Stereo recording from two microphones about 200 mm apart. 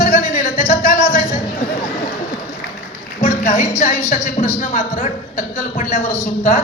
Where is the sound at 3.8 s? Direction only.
35° left (ahead or behind).